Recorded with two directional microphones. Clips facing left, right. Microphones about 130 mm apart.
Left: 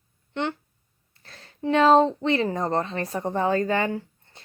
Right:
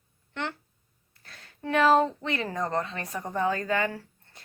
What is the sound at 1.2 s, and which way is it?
Speech, 30° left (ahead or behind).